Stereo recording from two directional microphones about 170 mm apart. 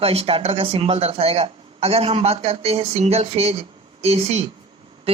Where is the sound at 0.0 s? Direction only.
35° right (ahead or behind).